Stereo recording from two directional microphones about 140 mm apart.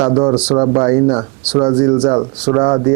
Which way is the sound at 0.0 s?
25° right (ahead or behind).